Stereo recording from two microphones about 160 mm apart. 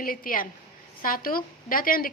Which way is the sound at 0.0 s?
60° left (ahead or behind).